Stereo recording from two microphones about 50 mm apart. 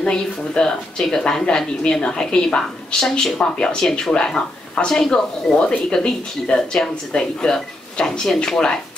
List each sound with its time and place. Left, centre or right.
0.0 s speech: centre